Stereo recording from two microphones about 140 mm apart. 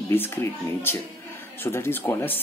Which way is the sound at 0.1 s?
15° left (ahead or behind).